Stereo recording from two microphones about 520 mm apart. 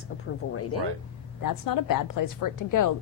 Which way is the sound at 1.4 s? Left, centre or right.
Left.